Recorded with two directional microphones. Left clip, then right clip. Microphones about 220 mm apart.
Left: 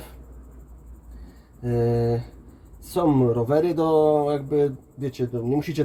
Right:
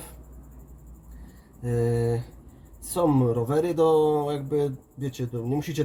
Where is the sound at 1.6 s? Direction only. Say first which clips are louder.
Left 3 dB; 15° left (ahead or behind).